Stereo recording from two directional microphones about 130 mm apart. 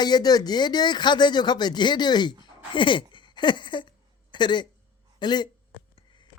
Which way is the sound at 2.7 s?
40° left (ahead or behind).